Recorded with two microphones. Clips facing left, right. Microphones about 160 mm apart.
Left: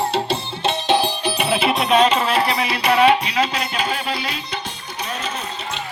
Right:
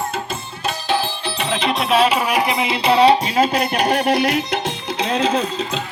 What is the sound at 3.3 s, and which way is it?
Music, 60° right (ahead or behind).